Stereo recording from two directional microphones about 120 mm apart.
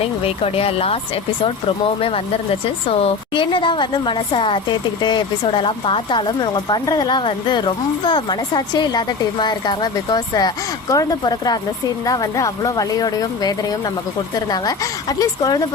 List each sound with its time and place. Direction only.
0.0 s a woman's voice: 55° left (ahead or behind); by 15.6 s 35° left (ahead or behind)